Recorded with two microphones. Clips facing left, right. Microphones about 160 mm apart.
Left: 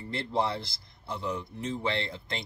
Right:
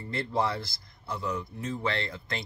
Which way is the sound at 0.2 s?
25° left (ahead or behind).